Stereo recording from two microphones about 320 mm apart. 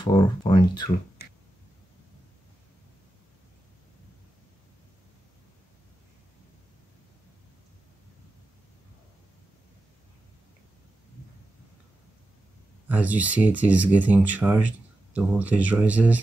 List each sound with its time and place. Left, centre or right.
0.0 s speech: centre
1.2 s finger snapping: left
12.8 s speech: centre